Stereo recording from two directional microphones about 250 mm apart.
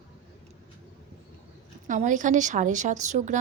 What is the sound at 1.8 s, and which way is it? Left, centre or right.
A woman's voice, right.